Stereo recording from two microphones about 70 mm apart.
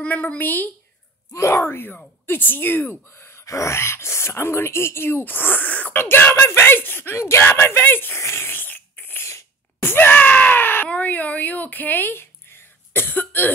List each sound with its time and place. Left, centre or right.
0.0 s a woman's voice: centre
1.3 s a woman's voice: left
3.4 s speech: left
7.4 s a sound: left
10.9 s speech: left